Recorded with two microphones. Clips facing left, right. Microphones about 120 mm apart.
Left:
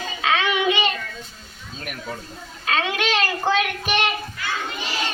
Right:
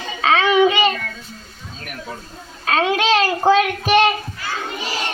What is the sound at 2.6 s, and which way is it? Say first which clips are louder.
Child singing: right 6 dB; 40° right (ahead or behind).